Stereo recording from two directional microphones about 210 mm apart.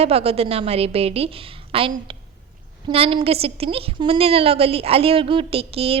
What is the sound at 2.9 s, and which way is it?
A woman's voice, 25° right (ahead or behind).